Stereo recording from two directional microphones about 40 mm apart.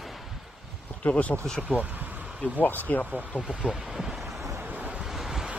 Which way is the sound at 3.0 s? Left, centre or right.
Right.